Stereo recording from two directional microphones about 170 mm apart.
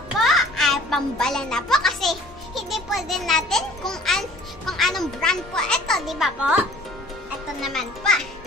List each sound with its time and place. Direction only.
0.2 s a child's voice: centre (ahead or behind)
7.6 s a child's voice: 5° left (ahead or behind)